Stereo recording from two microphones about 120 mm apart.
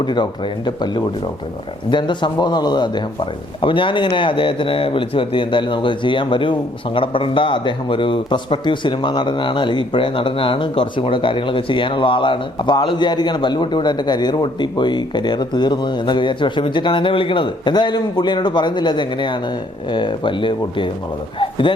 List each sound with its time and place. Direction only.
0.0 s speech: 40° left (ahead or behind)